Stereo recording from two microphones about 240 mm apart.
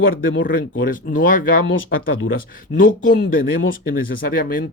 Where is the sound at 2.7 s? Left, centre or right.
Left.